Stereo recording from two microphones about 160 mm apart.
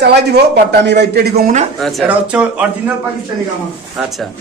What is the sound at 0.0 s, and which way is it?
A man's voice, 90° right.